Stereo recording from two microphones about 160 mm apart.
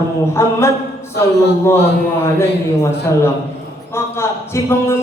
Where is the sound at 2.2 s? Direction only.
15° left (ahead or behind).